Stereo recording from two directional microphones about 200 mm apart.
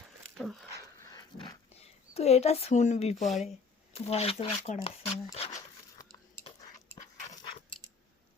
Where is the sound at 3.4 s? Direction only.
30° left (ahead or behind).